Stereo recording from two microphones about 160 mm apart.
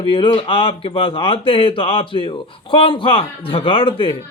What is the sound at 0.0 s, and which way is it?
A man's voice, 30° left (ahead or behind).